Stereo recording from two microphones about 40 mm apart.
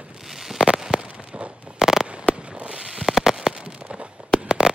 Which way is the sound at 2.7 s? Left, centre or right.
Centre.